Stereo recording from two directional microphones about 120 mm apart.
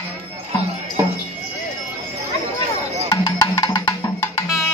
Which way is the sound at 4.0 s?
25° left (ahead or behind).